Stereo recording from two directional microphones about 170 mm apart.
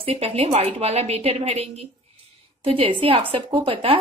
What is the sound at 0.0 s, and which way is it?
Speech, 35° right (ahead or behind).